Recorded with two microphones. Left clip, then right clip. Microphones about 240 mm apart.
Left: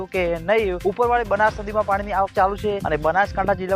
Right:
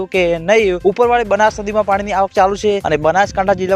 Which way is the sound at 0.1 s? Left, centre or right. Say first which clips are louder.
Right 7 dB; right.